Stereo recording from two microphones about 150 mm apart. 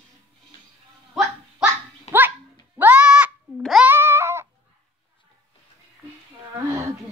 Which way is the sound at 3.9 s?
15° right (ahead or behind).